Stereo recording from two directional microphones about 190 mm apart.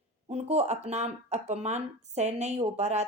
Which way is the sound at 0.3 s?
35° right (ahead or behind).